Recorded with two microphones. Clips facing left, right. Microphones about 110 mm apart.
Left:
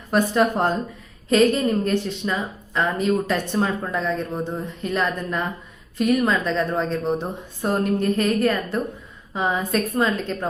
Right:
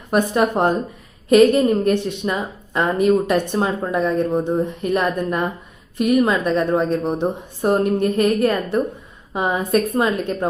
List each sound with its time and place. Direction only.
0.1 s speech: 15° right (ahead or behind)
1.4 s a woman's voice: 25° right (ahead or behind)
1.9 s a woman's voice: 15° right (ahead or behind)